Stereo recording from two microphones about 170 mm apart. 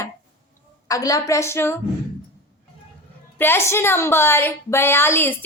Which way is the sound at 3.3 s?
15° left (ahead or behind).